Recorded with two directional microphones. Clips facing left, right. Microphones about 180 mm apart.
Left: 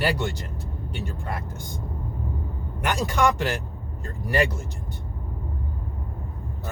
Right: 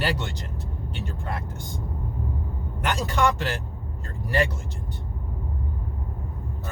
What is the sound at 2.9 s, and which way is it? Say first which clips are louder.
Speech: left 1 dB; 15° left (ahead or behind).